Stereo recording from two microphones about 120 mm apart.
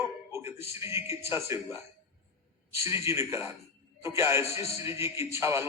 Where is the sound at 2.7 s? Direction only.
20° right (ahead or behind).